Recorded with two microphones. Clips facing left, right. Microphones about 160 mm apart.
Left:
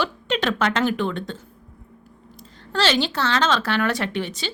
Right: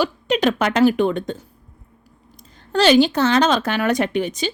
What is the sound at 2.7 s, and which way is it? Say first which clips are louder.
Speech: right 8 dB; 15° right (ahead or behind).